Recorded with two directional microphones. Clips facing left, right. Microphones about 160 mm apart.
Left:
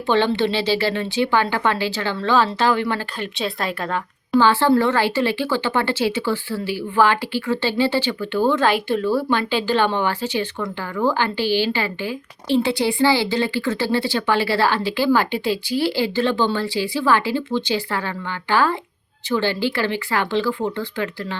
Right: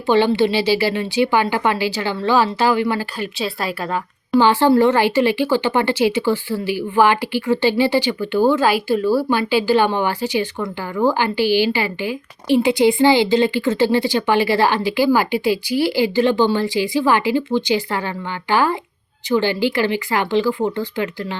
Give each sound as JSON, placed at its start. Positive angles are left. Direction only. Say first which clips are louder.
{"t": 0.1, "sound": "a woman's voice", "louder": "right 3 dB", "side_deg": -10}